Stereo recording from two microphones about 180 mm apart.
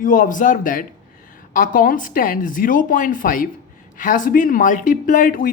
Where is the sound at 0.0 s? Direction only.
45° left (ahead or behind).